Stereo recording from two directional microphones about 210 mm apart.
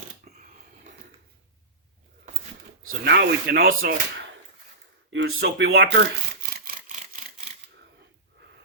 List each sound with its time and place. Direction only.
3.0 s speech: 50° right (ahead or behind)
5.1 s speech: 55° right (ahead or behind)
5.7 s a sound: 55° right (ahead or behind)